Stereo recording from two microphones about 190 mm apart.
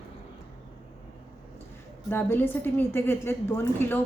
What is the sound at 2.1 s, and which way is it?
A woman's voice, 10° left (ahead or behind).